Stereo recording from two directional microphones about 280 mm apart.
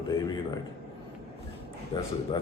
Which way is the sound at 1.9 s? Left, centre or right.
Centre.